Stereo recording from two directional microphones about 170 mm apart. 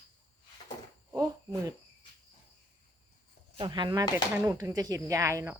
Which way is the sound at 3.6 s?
25° right (ahead or behind).